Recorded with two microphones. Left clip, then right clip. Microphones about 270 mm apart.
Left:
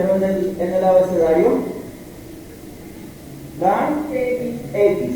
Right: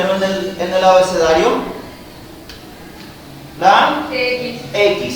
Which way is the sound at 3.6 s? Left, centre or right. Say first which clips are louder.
Right 7 dB; centre.